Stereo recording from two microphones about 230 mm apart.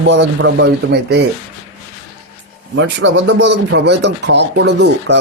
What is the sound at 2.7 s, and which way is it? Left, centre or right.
Speech, right.